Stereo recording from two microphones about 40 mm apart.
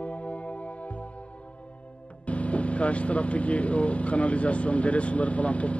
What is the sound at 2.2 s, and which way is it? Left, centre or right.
Speech, left.